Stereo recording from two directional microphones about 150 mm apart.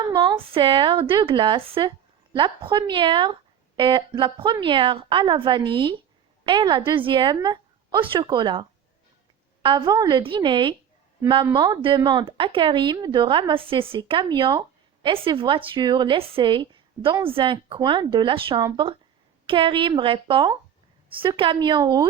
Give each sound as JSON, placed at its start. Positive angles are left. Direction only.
{"t": 0.2, "sound": "speech", "side_deg": -35}
{"t": 9.6, "sound": "speech", "side_deg": -25}